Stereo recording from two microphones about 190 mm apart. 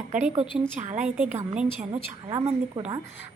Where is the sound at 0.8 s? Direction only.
40° right (ahead or behind).